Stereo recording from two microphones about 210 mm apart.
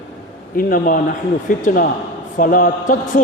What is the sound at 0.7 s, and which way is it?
A man's voice, 40° left (ahead or behind).